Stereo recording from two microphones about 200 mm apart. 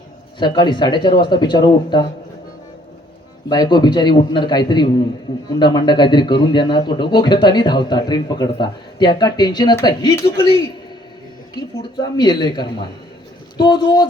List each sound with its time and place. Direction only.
0.3 s speech: 20° left (ahead or behind)
3.5 s speech: 20° left (ahead or behind)
11.5 s speech: 20° left (ahead or behind)